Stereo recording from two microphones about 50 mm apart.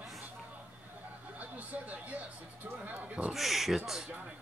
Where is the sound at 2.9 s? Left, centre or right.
Right.